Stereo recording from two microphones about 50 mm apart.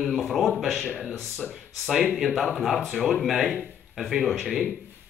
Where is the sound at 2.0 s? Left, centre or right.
Centre.